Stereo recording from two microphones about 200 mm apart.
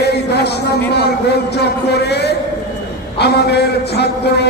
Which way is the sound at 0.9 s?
55° left (ahead or behind).